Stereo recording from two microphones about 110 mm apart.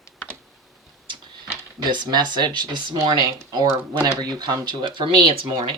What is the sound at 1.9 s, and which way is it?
Speech, 40° right (ahead or behind).